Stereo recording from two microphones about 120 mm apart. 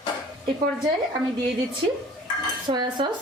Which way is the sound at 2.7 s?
35° right (ahead or behind).